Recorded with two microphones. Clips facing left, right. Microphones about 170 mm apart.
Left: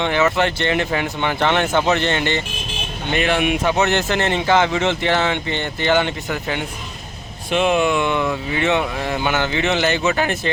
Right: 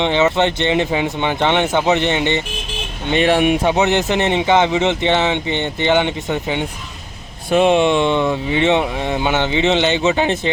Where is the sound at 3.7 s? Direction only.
20° right (ahead or behind).